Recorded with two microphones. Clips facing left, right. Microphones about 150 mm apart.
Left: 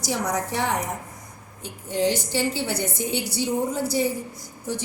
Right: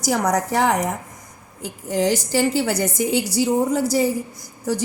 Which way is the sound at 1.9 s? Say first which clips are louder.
Right 4 dB; 90° right.